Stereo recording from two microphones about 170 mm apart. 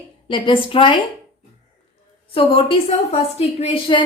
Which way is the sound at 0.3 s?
30° left (ahead or behind).